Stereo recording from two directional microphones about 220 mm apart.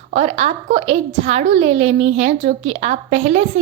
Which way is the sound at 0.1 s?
30° right (ahead or behind).